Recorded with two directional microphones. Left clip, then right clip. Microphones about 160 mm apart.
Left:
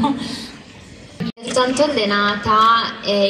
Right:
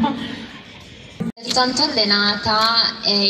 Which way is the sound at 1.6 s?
40° right (ahead or behind).